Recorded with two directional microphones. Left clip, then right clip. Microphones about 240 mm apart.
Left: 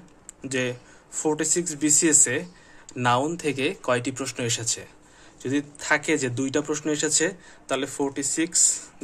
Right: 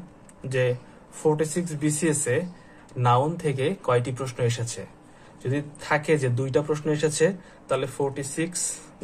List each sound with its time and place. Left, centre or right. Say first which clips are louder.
0.5 s a man's voice: right 3 dB; left